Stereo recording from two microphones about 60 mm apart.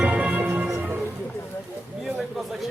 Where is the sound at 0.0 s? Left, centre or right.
Right.